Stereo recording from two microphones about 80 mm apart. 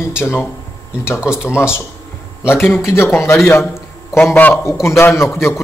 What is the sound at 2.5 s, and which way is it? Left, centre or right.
Speech, left.